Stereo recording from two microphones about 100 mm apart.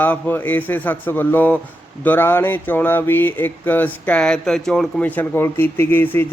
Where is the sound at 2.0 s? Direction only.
20° left (ahead or behind).